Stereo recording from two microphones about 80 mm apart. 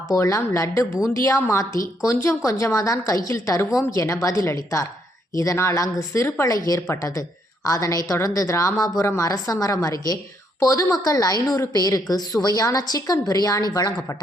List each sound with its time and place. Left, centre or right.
0.1 s a woman's voice: left
10.9 s a woman's voice: left